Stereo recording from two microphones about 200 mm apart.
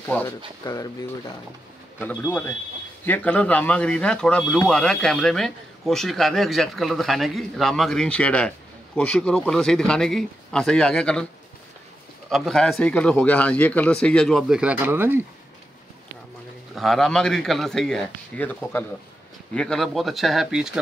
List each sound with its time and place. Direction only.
0.7 s speech: 20° left (ahead or behind)
12.3 s speech: centre (ahead or behind)
16.7 s speech: centre (ahead or behind)